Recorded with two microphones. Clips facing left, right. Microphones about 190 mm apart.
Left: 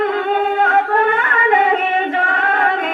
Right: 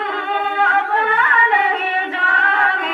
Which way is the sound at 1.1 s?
45° left (ahead or behind).